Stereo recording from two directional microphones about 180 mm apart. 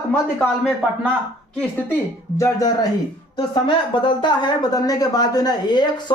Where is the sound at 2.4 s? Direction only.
20° left (ahead or behind).